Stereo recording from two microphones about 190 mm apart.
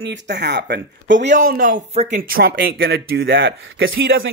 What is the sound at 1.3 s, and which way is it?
Speech, 45° right (ahead or behind).